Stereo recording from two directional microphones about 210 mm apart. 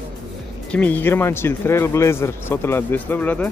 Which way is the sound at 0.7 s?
5° left (ahead or behind).